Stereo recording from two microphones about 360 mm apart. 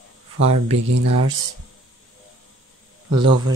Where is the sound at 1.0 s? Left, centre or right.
Right.